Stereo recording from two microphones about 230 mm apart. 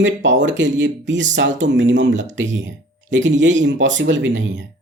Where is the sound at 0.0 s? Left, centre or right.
Right.